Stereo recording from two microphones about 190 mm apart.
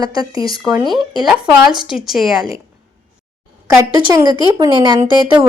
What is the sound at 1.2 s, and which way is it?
Speech, 5° right (ahead or behind).